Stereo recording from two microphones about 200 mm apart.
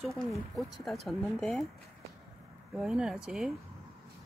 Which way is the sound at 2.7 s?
5° right (ahead or behind).